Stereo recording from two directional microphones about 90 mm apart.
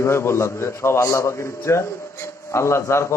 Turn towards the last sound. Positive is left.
turn(degrees=30)  # may be behind; listen again after turning